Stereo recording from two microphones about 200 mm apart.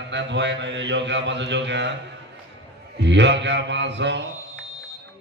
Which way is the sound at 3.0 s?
60° right (ahead or behind).